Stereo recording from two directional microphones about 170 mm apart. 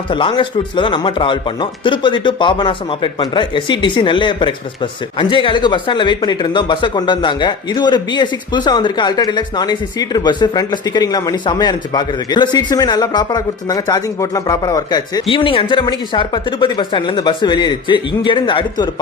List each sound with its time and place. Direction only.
0.1 s speech: 30° left (ahead or behind)